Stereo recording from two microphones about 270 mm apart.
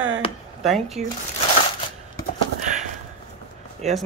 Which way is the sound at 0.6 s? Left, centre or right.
Centre.